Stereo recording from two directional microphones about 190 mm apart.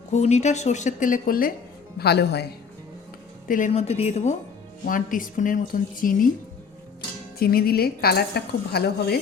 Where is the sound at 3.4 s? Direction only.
45° left (ahead or behind).